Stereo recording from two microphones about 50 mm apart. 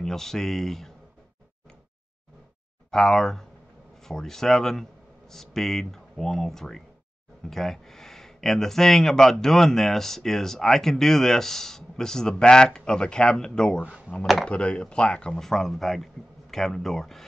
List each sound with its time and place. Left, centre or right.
0.0 s speech: centre
2.9 s speech: centre
13.8 s speech: centre
14.5 s speech: left
15.4 s speech: centre